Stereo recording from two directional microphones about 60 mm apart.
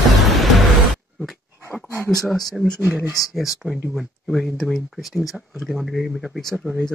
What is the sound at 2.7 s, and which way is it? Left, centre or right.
Speech, right.